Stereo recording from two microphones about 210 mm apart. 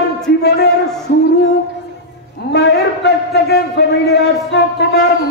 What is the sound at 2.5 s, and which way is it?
A man's voice, 55° left (ahead or behind).